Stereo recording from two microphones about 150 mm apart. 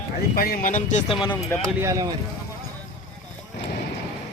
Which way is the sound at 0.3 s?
80° left.